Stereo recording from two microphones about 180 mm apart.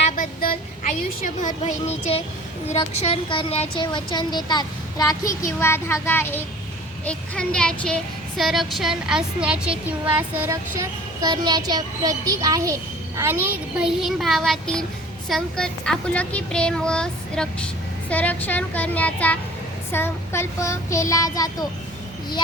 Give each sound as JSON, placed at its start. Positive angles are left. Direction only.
{"t": 1.2, "sound": "speech", "side_deg": 45}
{"t": 18.1, "sound": "child singing", "side_deg": 10}